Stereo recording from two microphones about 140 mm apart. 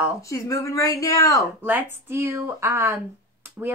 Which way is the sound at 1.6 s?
15° right (ahead or behind).